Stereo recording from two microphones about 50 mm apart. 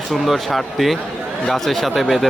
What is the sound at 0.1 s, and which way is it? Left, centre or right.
Speech, centre.